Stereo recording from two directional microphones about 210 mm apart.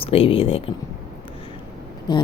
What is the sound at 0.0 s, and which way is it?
Speech, 25° left (ahead or behind).